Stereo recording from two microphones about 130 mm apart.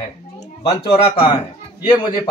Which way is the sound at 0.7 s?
45° left (ahead or behind).